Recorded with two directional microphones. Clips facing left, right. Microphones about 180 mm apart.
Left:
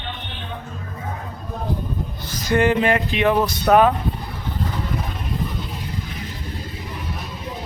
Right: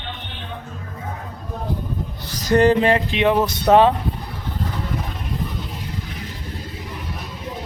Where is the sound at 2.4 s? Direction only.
40° right (ahead or behind).